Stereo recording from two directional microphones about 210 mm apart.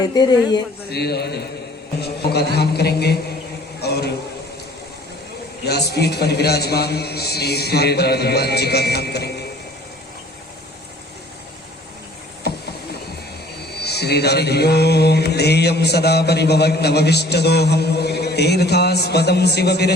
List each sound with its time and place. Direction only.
0.0 s a man's voice: 20° left (ahead or behind)
0.9 s mantra: 50° left (ahead or behind)
2.6 s mantra: 50° left (ahead or behind)
3.8 s a sound: 50° left (ahead or behind)
5.6 s mantra: 50° left (ahead or behind)
13.7 s mantra: 50° left (ahead or behind)